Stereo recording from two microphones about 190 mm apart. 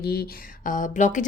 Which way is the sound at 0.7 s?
45° left (ahead or behind).